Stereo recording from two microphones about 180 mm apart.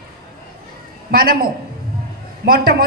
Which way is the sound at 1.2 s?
55° right (ahead or behind).